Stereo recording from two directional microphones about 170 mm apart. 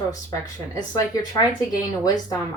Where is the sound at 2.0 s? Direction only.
20° left (ahead or behind).